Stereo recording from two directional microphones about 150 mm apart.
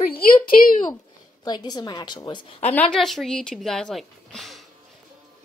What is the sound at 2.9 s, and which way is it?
Speech, centre (ahead or behind).